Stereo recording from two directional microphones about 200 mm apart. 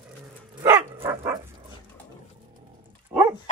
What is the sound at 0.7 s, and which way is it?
Dog, 15° right (ahead or behind).